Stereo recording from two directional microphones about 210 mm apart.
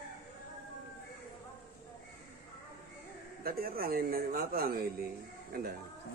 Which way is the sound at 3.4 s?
45° right (ahead or behind).